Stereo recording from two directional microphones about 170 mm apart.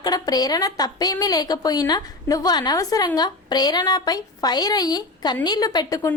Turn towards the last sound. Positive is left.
turn(degrees=20)  # may be behind; listen again after turning